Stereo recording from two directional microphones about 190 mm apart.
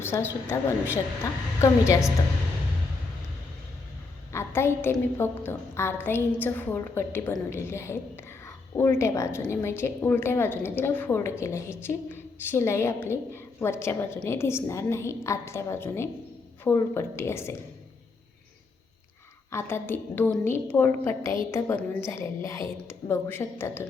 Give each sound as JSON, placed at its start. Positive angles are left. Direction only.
{"t": 0.0, "sound": "a woman's voice", "side_deg": 10}
{"t": 4.3, "sound": "a woman's voice", "side_deg": 15}
{"t": 19.5, "sound": "a woman's voice", "side_deg": 15}